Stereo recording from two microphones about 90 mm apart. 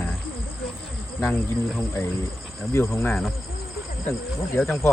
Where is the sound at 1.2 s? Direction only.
25° left (ahead or behind).